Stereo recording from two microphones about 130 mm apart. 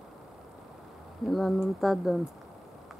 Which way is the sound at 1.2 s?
Centre (ahead or behind).